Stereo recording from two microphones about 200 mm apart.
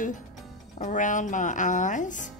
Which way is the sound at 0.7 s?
40° left (ahead or behind).